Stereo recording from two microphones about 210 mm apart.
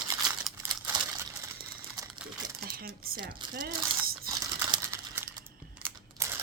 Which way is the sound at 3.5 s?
45° right (ahead or behind).